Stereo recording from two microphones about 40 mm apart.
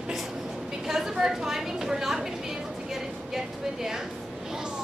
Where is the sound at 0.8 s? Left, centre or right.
Centre.